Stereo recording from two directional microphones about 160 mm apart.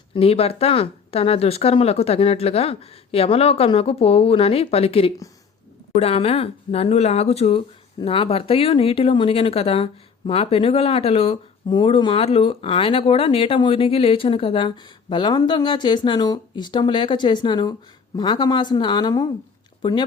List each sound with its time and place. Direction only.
0.1 s a woman's voice: 40° left (ahead or behind)